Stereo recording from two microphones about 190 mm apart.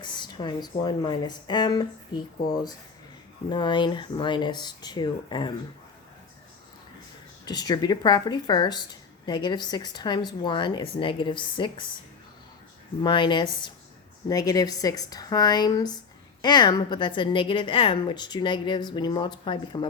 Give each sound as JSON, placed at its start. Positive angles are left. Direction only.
{"t": 0.0, "sound": "speech", "side_deg": 25}
{"t": 7.4, "sound": "speech", "side_deg": 20}
{"t": 13.0, "sound": "speech", "side_deg": 25}